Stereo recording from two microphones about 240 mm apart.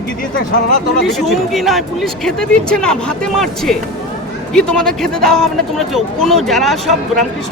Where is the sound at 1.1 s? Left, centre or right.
Centre.